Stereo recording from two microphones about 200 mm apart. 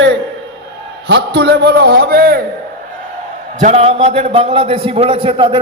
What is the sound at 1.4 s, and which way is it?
A man's voice, 55° right (ahead or behind).